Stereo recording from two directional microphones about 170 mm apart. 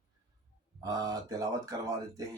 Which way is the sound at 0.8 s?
20° right (ahead or behind).